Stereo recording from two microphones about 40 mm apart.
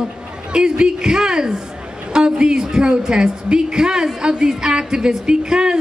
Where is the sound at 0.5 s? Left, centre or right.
Right.